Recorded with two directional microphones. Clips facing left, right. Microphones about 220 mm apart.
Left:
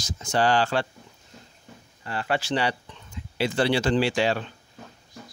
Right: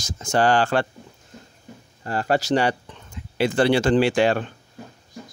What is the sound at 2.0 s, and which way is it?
Speech, 40° right (ahead or behind).